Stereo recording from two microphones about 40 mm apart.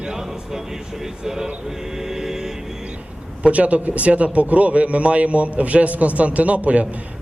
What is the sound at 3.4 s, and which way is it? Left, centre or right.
A man's voice, right.